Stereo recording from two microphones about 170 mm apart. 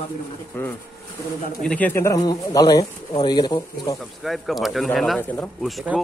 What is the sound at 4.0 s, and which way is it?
A man's voice, centre (ahead or behind).